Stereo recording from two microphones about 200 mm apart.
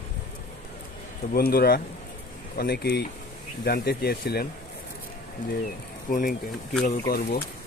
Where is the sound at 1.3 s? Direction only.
50° left (ahead or behind).